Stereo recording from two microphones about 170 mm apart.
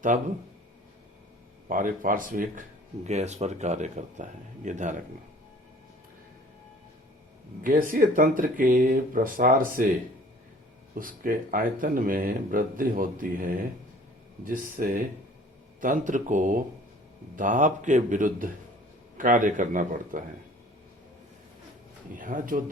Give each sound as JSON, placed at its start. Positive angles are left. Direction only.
{"t": 0.1, "sound": "speech", "side_deg": -50}
{"t": 1.6, "sound": "speech", "side_deg": -50}
{"t": 7.6, "sound": "speech", "side_deg": -55}
{"t": 10.9, "sound": "speech", "side_deg": -55}
{"t": 22.1, "sound": "speech", "side_deg": -50}